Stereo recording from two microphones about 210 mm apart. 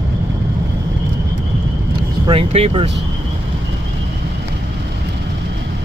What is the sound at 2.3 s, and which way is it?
Speech, 30° right (ahead or behind).